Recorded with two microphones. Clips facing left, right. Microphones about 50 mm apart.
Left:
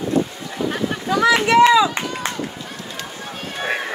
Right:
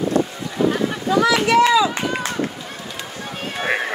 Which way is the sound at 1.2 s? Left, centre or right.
Left.